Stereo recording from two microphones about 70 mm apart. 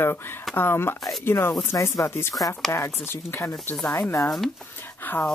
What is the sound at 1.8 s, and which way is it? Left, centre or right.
Speech, left.